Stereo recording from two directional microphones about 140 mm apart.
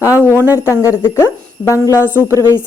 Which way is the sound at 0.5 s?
20° left (ahead or behind).